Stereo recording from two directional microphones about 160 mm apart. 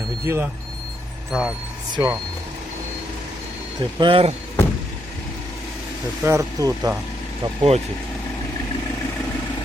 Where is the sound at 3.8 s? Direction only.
30° right (ahead or behind).